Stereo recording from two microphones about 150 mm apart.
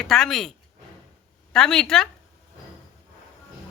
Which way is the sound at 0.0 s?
Centre (ahead or behind).